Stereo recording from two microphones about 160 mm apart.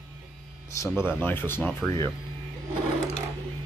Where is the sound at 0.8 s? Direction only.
15° left (ahead or behind).